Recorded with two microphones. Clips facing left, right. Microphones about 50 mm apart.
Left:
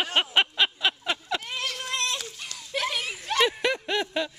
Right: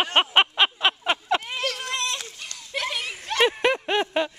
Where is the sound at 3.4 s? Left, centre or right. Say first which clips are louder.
Right 4 dB; right.